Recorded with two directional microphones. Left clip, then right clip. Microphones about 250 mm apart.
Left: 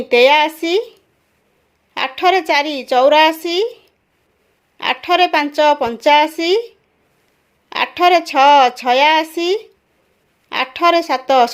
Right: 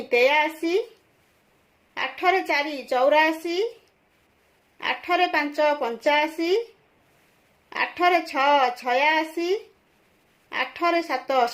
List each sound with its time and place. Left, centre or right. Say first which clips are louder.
0.1 s speech: left 9 dB; left
1.9 s speech: left 8 dB; left
4.8 s speech: left 9 dB; left
7.7 s speech: left 8 dB; left